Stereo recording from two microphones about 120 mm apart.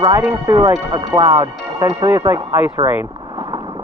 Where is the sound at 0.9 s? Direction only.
40° right (ahead or behind); by 2.7 s 20° right (ahead or behind).